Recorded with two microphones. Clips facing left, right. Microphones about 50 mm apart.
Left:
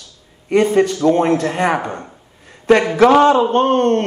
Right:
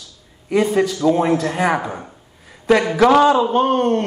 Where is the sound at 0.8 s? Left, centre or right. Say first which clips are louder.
Left 2 dB; left.